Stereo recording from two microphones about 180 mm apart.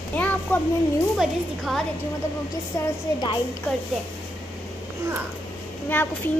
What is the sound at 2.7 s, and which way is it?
Speech, 15° left (ahead or behind).